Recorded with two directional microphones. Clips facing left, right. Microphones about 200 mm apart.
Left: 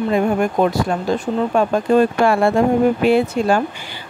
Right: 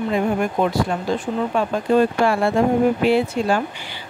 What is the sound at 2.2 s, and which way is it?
Speech, 55° left (ahead or behind).